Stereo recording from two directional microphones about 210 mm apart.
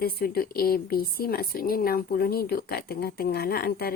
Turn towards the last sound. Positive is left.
turn(degrees=45)  # may be behind; listen again after turning